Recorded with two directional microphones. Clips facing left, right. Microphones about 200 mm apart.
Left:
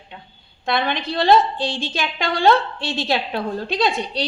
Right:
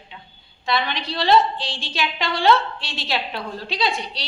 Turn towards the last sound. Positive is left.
turn(degrees=50)  # may be behind; listen again after turning